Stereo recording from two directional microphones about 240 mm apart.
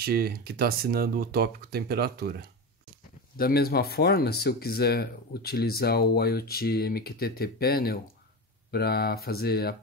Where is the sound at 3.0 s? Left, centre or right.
Left.